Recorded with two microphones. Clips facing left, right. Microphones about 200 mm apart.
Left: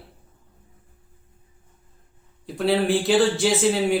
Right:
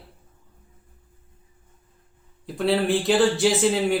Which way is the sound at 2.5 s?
Centre (ahead or behind).